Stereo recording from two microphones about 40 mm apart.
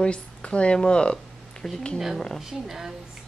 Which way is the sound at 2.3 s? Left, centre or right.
Centre.